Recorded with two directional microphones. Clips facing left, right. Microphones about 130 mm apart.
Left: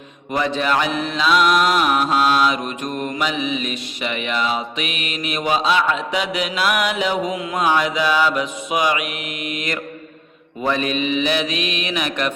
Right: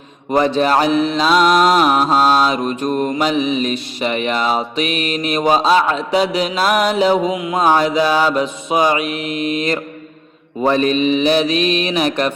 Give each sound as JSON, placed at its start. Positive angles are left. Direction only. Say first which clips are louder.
{"t": 0.3, "sound": "mantra", "louder": "right 6 dB", "side_deg": -35}
{"t": 7.3, "sound": "mantra", "louder": "right 4 dB", "side_deg": -20}
{"t": 7.6, "sound": "mantra", "louder": "right 5 dB", "side_deg": -35}